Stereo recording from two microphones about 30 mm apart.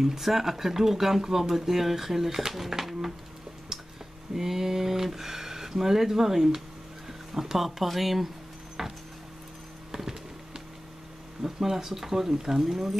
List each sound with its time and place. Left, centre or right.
0.0 s speech: centre
4.4 s speech: centre
11.4 s speech: centre